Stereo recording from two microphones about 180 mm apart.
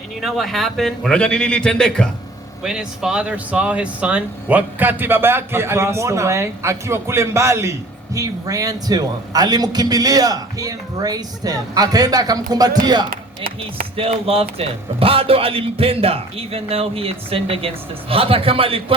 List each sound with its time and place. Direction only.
0.2 s a man's voice: centre (ahead or behind); by 18.9 s 30° right (ahead or behind)